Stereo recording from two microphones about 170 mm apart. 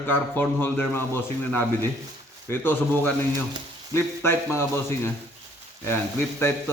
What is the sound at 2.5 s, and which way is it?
Speech, 15° left (ahead or behind).